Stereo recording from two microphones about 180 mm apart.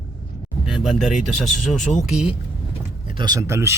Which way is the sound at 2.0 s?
5° right (ahead or behind).